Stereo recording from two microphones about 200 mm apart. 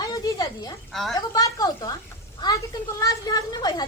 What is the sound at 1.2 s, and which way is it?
A woman's voice, 20° left (ahead or behind).